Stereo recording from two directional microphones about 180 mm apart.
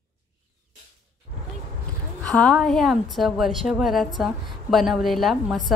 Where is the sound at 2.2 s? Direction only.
5° left (ahead or behind).